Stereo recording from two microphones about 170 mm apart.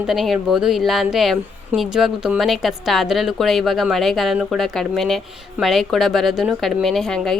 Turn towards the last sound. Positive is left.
turn(degrees=0)  # may be behind; listen again after turning